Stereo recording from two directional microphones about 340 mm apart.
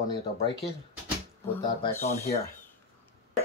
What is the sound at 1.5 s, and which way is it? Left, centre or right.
Speech, centre.